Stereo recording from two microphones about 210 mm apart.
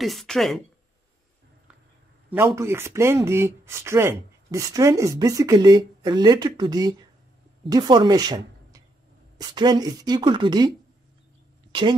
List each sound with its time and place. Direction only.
0.0 s speech: centre (ahead or behind)
2.3 s speech: 10° right (ahead or behind)
11.7 s speech: 25° right (ahead or behind)